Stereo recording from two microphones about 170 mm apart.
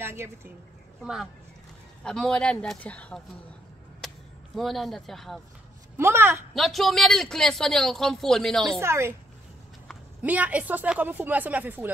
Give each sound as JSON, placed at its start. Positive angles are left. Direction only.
{"t": 0.0, "sound": "speech", "side_deg": -15}
{"t": 1.0, "sound": "speech", "side_deg": 0}
{"t": 4.6, "sound": "speech", "side_deg": 0}
{"t": 5.9, "sound": "speech", "side_deg": -15}
{"t": 6.5, "sound": "speech", "side_deg": 0}
{"t": 8.7, "sound": "speech", "side_deg": -15}
{"t": 10.2, "sound": "speech", "side_deg": -10}